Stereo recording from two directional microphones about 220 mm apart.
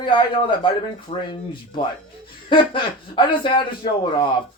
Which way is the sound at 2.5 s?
20° left (ahead or behind).